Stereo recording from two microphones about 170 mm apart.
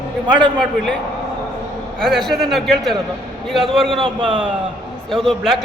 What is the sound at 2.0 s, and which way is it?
A man's voice, centre (ahead or behind).